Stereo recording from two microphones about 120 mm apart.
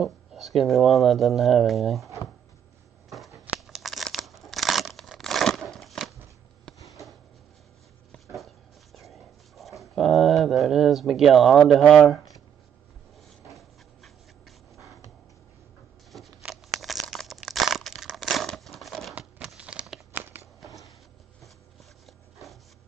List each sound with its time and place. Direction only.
0.0 s speech: centre (ahead or behind)
3.5 s crumpling: 5° right (ahead or behind)
8.4 s dog: centre (ahead or behind)
13.5 s dog: centre (ahead or behind)
16.1 s a sound: centre (ahead or behind)
19.1 s computer keyboard: 10° right (ahead or behind)
20.1 s a sound: 20° right (ahead or behind)